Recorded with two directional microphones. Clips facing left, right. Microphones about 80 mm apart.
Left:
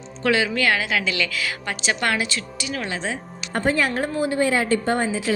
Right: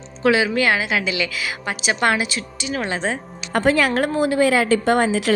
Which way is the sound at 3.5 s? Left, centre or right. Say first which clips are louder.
Right 4 dB; right.